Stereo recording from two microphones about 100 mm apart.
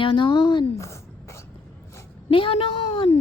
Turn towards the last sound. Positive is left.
turn(degrees=80)